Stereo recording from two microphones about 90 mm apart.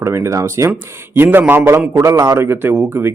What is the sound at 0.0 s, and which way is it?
Speech, 35° right (ahead or behind).